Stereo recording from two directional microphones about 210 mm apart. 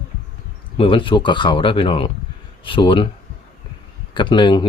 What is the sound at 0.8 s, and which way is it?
Speech, 25° left (ahead or behind).